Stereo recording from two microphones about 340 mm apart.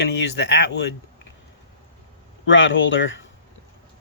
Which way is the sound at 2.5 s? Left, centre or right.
Left.